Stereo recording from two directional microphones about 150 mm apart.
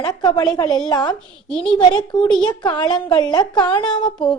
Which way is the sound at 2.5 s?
30° left (ahead or behind).